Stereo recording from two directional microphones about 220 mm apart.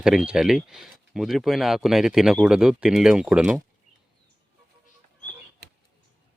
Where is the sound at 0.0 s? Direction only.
5° right (ahead or behind).